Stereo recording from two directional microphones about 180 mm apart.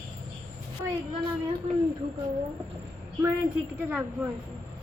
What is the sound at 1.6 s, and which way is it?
Speech, 35° right (ahead or behind).